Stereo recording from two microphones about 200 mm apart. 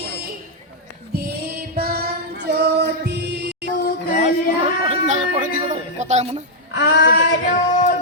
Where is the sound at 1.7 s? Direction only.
50° right (ahead or behind).